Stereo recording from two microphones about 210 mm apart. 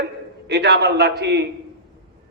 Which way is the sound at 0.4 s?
50° right (ahead or behind).